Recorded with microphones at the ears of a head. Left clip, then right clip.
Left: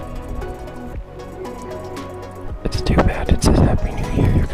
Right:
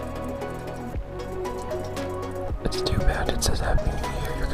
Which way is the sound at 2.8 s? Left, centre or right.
Left.